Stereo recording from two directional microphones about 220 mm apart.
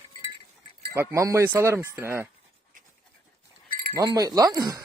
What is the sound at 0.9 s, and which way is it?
Speech, 15° right (ahead or behind).